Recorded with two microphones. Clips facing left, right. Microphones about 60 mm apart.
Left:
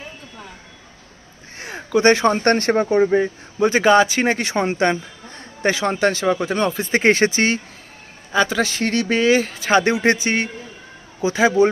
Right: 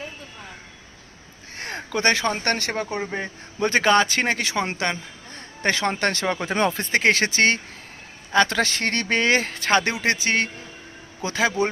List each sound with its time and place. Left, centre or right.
1.6 s a sound: centre
2.0 s speech: left
3.1 s speech: centre
4.4 s speech: left
4.8 s a sound: left
5.6 s speech: centre
6.9 s speech: left
8.3 s speech: centre
9.8 s speech: left